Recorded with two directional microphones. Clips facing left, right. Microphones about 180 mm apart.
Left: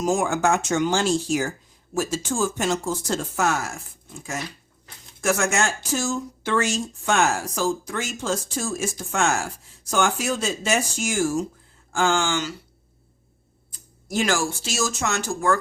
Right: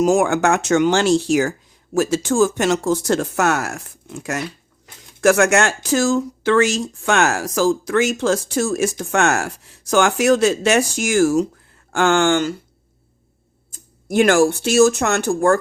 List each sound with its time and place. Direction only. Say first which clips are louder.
0.0 s speech: right 6 dB; 70° right (ahead or behind); by 12.5 s 55° right (ahead or behind)
13.7 s speech: right 7 dB; 50° right (ahead or behind)